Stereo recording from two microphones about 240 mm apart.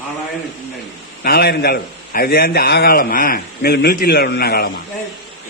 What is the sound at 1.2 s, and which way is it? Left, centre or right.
A man's voice, left.